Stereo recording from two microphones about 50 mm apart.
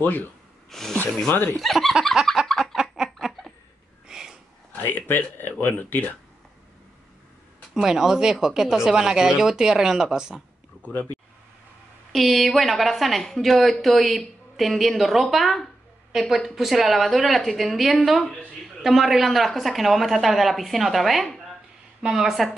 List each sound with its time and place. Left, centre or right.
0.0 s speech: left
0.7 s speech: centre
1.3 s speech: left
1.6 s a woman's voice: centre
2.6 s a sound: centre
4.1 s sniff: centre
4.7 s speech: left
7.7 s speech: centre
12.1 s a woman's voice: centre
22.0 s speech: centre